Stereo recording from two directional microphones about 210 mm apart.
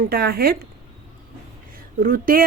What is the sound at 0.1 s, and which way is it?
Speech, 50° right (ahead or behind).